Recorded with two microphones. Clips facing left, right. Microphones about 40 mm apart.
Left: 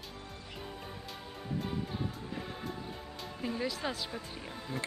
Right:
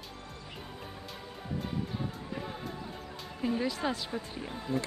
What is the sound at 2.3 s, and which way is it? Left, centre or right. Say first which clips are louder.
Music: right 1 dB; centre.